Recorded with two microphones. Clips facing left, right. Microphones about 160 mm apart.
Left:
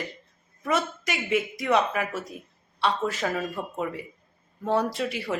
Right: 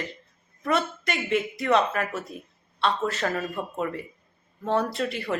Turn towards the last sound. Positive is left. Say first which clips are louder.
# even
turn(degrees=10)  # may be behind; listen again after turning